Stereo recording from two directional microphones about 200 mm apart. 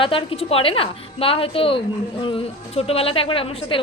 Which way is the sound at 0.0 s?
25° left (ahead or behind).